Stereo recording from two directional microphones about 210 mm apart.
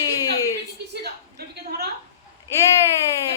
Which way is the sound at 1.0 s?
50° right (ahead or behind).